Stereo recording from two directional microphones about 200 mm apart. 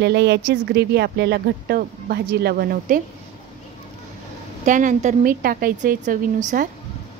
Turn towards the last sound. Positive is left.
turn(degrees=-45)  # may be behind; listen again after turning